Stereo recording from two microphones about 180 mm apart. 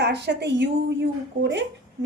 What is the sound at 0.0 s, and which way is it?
A woman's voice, 70° right (ahead or behind).